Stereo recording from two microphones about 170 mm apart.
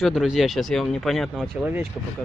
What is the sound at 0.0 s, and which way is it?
Speech, centre (ahead or behind).